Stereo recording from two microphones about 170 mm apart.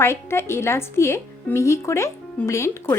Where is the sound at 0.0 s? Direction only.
15° left (ahead or behind).